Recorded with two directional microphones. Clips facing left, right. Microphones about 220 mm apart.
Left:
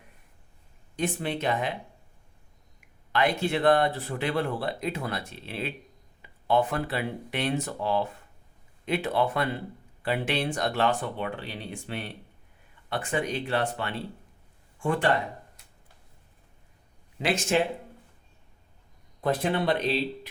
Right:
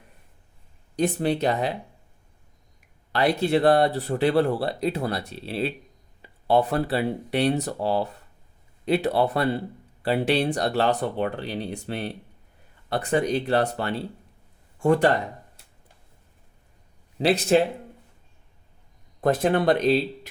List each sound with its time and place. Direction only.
0.9 s speech: 40° right (ahead or behind)
3.1 s speech: 35° right (ahead or behind)
17.2 s speech: 35° right (ahead or behind)
19.2 s speech: 45° right (ahead or behind)